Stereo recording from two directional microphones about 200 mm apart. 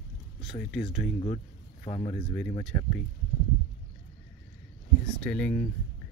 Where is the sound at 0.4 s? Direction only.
Centre (ahead or behind).